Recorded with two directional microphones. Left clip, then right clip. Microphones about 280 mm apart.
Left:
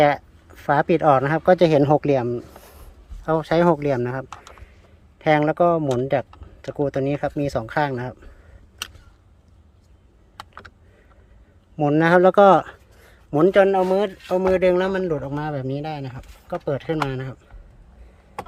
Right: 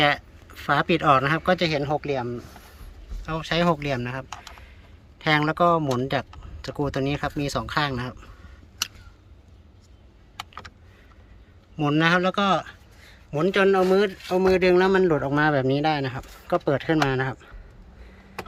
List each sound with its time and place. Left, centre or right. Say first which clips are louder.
0.0 s speech: left 4 dB; centre; by 2.7 s left
3.2 s speech: left 6 dB; left
11.8 s speech: left 5 dB; centre
13.6 s speech: right 1 dB; centre